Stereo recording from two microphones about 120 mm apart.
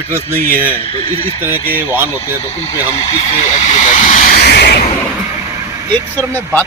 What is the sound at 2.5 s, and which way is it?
Speech, 60° left (ahead or behind).